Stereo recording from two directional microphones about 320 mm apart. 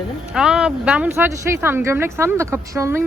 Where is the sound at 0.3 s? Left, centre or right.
Centre.